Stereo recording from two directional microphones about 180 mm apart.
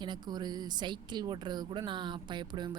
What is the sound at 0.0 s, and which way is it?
Speech, 25° right (ahead or behind).